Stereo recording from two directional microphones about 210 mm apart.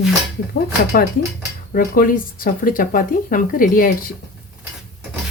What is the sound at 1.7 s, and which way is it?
Speech, 40° left (ahead or behind).